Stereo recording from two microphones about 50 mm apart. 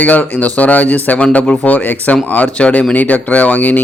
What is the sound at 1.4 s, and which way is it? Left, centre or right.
Speech, centre.